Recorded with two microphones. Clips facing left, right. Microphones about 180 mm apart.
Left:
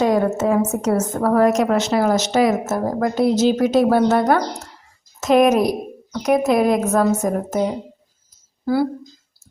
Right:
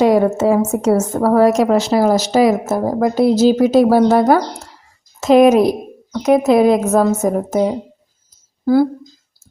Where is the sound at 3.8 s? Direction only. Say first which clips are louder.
Right 4 dB; 10° right (ahead or behind).